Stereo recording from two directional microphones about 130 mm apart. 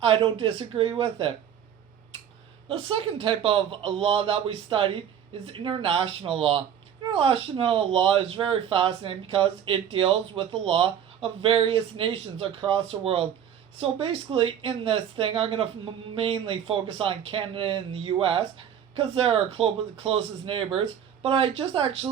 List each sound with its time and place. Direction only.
0.0 s speech: 45° right (ahead or behind)
2.6 s speech: 45° right (ahead or behind)